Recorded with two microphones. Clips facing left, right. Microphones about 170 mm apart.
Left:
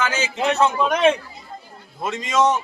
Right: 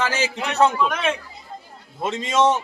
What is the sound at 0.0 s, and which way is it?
Speech, 35° right (ahead or behind).